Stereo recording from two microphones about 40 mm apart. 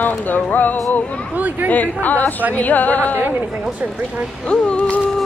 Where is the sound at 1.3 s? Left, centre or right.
Right.